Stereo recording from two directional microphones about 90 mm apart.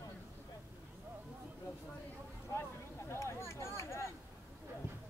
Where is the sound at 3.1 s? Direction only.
30° left (ahead or behind).